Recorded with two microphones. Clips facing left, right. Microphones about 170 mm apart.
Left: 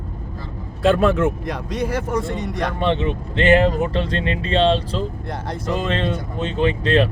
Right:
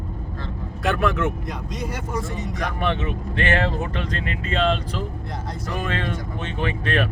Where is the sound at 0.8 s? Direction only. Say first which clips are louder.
Left 6 dB; 25° left (ahead or behind).